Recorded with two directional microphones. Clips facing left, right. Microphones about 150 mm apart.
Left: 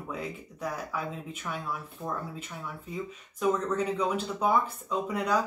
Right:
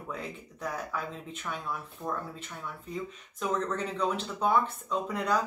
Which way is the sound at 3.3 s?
10° left (ahead or behind).